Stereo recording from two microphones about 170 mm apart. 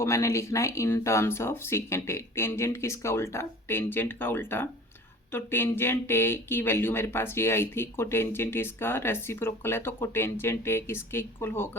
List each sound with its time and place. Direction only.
0.0 s speech: 15° left (ahead or behind)